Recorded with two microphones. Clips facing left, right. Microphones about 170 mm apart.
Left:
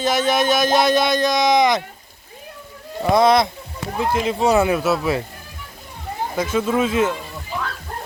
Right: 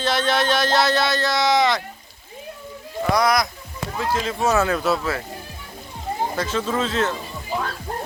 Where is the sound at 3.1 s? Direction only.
25° left (ahead or behind).